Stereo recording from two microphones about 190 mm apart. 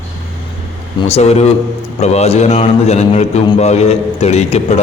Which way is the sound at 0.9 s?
35° left (ahead or behind).